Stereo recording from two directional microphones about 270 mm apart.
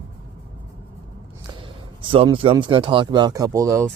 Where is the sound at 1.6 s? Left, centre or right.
Centre.